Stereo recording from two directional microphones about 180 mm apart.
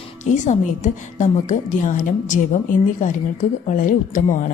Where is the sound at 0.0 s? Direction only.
40° left (ahead or behind).